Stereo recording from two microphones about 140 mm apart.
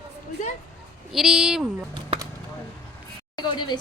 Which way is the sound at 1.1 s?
Centre (ahead or behind).